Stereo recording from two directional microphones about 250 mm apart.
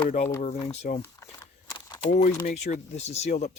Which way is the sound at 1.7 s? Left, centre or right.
Centre.